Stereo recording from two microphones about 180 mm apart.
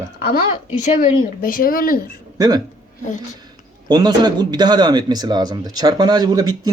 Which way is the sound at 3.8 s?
25° right (ahead or behind).